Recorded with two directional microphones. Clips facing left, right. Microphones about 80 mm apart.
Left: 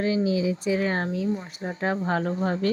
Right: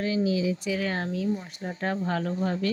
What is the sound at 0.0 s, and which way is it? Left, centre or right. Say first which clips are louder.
Speech: left 2 dB; left.